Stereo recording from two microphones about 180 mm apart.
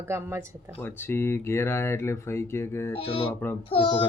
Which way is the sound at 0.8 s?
10° left (ahead or behind).